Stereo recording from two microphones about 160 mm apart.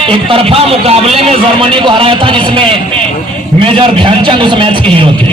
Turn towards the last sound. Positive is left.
turn(degrees=-30)  # may be behind; listen again after turning